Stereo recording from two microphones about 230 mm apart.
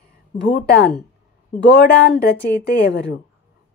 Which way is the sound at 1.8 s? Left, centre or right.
Left.